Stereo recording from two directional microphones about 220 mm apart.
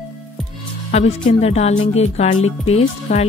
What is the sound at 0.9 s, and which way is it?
A woman's voice, 30° left (ahead or behind).